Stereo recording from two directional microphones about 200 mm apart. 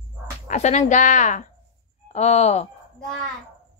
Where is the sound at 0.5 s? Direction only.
35° left (ahead or behind).